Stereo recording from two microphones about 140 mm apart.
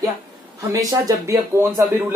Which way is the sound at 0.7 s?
25° right (ahead or behind).